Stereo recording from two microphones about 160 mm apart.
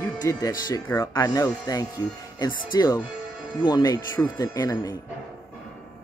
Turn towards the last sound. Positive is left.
turn(degrees=20)  # may be behind; listen again after turning